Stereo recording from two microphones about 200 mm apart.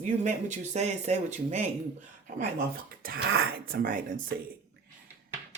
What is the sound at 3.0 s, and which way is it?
Speech, 50° right (ahead or behind).